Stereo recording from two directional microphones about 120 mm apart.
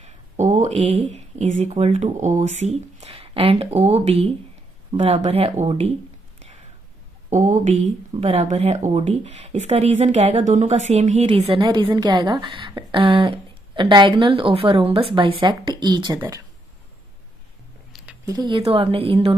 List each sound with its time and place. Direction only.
0.0 s a sound: 75° right (ahead or behind)
1.7 s a woman's voice: 55° right (ahead or behind)
2.1 s speech: 75° right (ahead or behind); by 5.9 s 60° right (ahead or behind)
7.2 s a woman's voice: 85° right
8.2 s speech: 65° right (ahead or behind); by 10.7 s 85° right
10.7 s a woman's voice: 70° right (ahead or behind)
11.2 s a woman's voice: 55° right (ahead or behind)
11.6 s a woman's voice: 40° right (ahead or behind)
18.2 s speech: 35° right (ahead or behind)
18.6 s a woman's voice: 50° right (ahead or behind)